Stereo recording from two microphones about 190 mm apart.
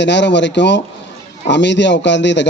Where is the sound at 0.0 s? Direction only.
70° left (ahead or behind).